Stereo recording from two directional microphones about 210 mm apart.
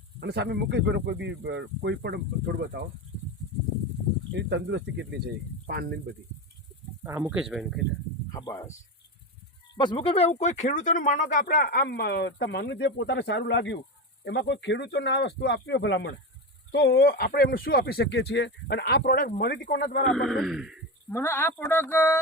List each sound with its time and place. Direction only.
0.2 s speech: 50° right (ahead or behind)
4.3 s speech: 55° right (ahead or behind)
7.0 s speech: 10° right (ahead or behind)
8.3 s speech: 20° left (ahead or behind)
9.7 s speech: 20° left (ahead or behind); by 20.1 s 45° left (ahead or behind)
20.1 s speech: centre (ahead or behind)
21.1 s speech: 10° left (ahead or behind)